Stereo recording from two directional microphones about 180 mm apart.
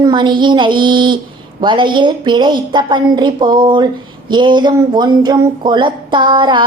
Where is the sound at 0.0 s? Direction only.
25° right (ahead or behind).